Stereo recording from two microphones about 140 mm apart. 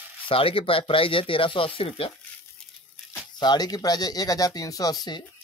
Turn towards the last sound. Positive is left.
turn(degrees=30)  # may be behind; listen again after turning